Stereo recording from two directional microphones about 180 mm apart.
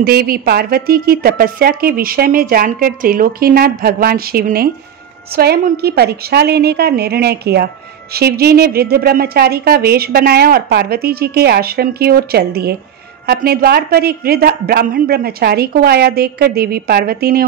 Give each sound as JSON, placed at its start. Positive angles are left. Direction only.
{"t": 0.0, "sound": "a woman's voice", "side_deg": -60}